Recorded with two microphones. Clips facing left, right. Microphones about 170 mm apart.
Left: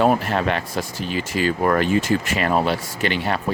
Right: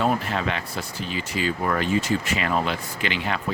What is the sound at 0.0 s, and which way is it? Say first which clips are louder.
Speech: left 5 dB; 55° left (ahead or behind).